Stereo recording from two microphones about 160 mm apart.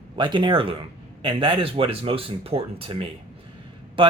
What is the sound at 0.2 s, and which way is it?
Speech, 30° right (ahead or behind).